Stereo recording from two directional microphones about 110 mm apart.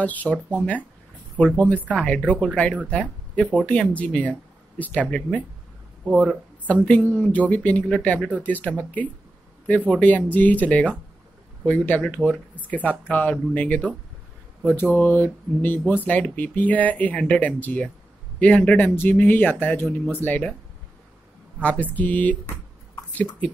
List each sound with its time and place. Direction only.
0.0 s speech: 15° left (ahead or behind)
6.7 s speech: 10° left (ahead or behind)
21.5 s speech: 15° left (ahead or behind)